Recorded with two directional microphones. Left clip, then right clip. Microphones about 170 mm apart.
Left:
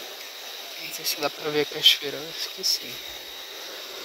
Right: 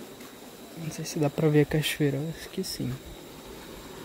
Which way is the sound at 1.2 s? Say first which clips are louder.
Right 3 dB; 30° right (ahead or behind).